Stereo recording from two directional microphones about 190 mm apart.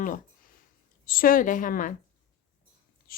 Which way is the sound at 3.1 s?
50° left (ahead or behind).